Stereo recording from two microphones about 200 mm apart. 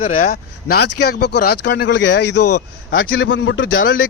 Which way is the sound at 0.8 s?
55° left (ahead or behind).